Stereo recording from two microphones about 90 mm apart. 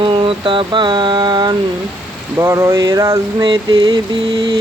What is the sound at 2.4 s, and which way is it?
Speech, 35° right (ahead or behind).